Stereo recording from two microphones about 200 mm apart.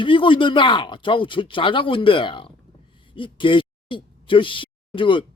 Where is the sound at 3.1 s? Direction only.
25° left (ahead or behind).